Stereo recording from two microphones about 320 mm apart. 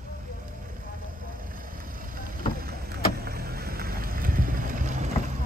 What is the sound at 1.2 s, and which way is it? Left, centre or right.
Vehicle, right.